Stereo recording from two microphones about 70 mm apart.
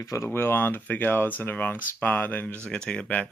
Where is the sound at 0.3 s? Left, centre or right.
Left.